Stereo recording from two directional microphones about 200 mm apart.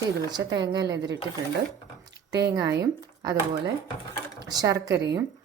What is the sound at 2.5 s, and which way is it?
A woman's voice, 20° right (ahead or behind).